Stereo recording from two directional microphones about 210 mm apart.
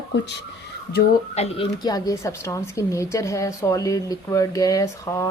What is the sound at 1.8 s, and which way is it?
A woman's voice, 15° left (ahead or behind).